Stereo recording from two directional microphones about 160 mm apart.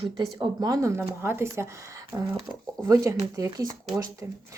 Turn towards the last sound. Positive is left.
turn(degrees=-20)  # may be behind; listen again after turning